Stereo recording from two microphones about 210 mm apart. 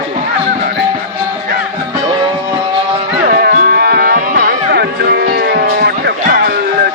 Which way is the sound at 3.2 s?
45° right (ahead or behind).